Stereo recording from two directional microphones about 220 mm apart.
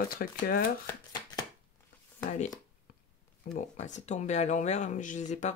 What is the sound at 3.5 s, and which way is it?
Speech, 30° left (ahead or behind).